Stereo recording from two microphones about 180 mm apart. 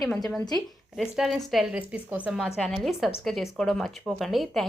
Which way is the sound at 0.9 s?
Centre (ahead or behind).